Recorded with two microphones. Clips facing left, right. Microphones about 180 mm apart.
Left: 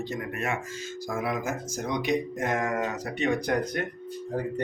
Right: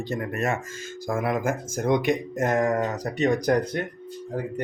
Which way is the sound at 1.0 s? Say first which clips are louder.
Right 5 dB; 50° right (ahead or behind).